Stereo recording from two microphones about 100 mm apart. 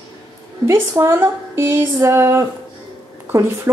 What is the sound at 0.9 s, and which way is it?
Speech, 30° right (ahead or behind).